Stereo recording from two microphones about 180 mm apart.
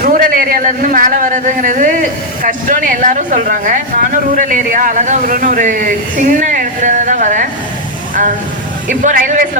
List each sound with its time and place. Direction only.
0.0 s a man's voice: 50° right (ahead or behind)
8.9 s a man's voice: 45° right (ahead or behind)